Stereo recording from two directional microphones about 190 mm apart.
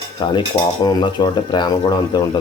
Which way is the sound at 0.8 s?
25° left (ahead or behind).